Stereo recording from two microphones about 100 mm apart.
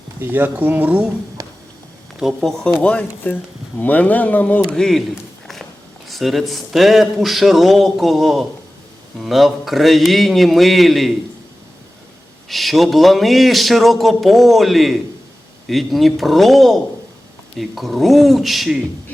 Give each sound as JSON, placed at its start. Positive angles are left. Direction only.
{"t": 0.2, "sound": "speech", "side_deg": -20}
{"t": 1.4, "sound": "a sound", "side_deg": -35}
{"t": 2.1, "sound": "a man's voice", "side_deg": 0}
{"t": 6.1, "sound": "a man's voice", "side_deg": 0}
{"t": 12.5, "sound": "a man's voice", "side_deg": 0}